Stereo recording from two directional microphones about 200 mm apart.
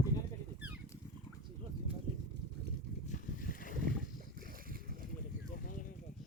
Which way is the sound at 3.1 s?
40° left (ahead or behind).